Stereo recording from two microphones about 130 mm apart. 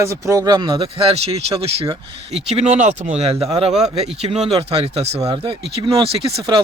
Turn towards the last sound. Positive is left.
turn(degrees=-50)  # may be behind; listen again after turning